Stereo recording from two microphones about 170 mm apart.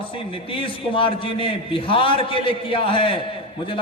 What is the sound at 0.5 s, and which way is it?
A man's voice, 30° left (ahead or behind).